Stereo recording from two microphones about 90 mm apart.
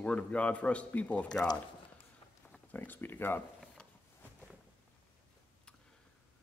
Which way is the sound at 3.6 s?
10° left (ahead or behind).